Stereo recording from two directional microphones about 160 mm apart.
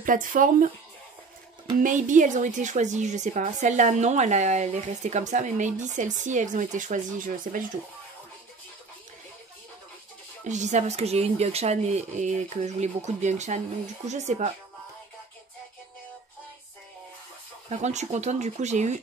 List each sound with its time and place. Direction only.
0.0 s speech: 55° right (ahead or behind)
1.8 s speech: 55° right (ahead or behind)
10.4 s speech: 50° right (ahead or behind)
17.6 s speech: 45° right (ahead or behind)